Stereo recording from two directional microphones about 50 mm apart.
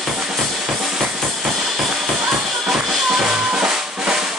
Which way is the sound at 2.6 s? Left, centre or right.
Centre.